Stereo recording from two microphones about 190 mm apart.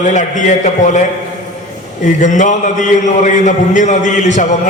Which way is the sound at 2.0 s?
40° left (ahead or behind).